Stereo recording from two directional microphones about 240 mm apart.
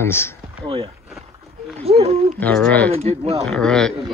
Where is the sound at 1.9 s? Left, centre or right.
Right.